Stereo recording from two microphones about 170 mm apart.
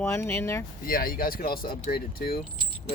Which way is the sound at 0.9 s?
60° left (ahead or behind).